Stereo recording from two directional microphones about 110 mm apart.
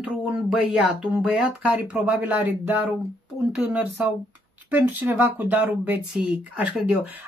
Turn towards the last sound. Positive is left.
turn(degrees=-15)  # may be behind; listen again after turning